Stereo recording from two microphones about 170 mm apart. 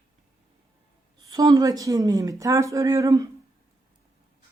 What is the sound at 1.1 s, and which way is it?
A woman's voice, 20° right (ahead or behind).